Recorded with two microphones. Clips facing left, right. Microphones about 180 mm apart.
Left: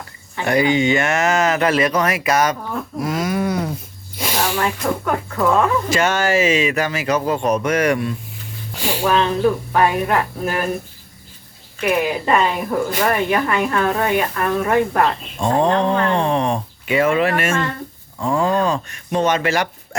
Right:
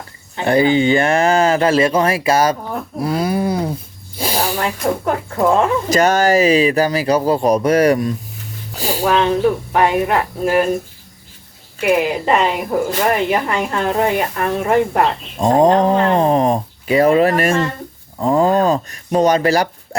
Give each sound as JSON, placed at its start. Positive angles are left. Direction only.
{"t": 0.3, "sound": "speech", "side_deg": -30}
{"t": 5.9, "sound": "speech", "side_deg": -40}
{"t": 9.7, "sound": "speech", "side_deg": -20}
{"t": 11.8, "sound": "speech", "side_deg": -25}
{"t": 15.4, "sound": "speech", "side_deg": -35}